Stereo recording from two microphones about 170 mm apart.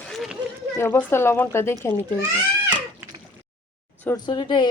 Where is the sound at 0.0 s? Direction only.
Centre (ahead or behind).